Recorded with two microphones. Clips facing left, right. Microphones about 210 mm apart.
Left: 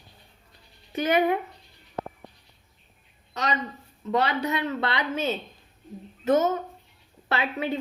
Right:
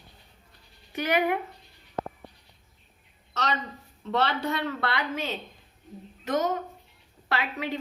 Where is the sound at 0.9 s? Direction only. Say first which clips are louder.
Left 3 dB; 30° left (ahead or behind).